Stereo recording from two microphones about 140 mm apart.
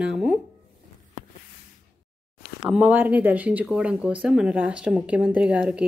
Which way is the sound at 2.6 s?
5° right (ahead or behind).